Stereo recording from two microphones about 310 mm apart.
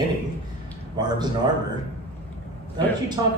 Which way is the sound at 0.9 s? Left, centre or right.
Centre.